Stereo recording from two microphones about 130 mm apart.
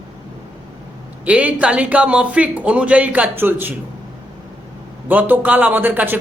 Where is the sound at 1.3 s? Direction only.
10° right (ahead or behind).